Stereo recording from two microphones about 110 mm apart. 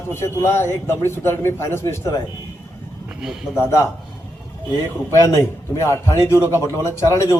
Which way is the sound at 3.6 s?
25° left (ahead or behind).